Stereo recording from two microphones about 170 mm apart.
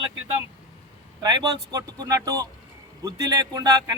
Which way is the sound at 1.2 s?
25° right (ahead or behind).